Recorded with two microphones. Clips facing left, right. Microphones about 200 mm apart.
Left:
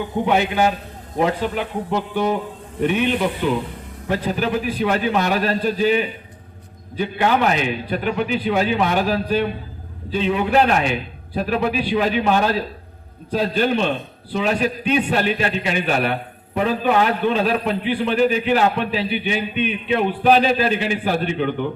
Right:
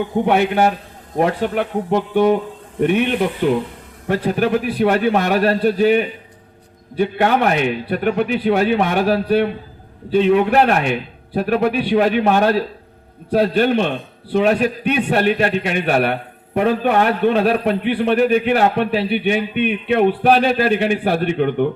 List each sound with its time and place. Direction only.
0.3 s a man's voice: 60° right (ahead or behind)